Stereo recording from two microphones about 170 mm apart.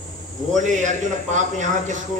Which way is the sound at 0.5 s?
45° right (ahead or behind).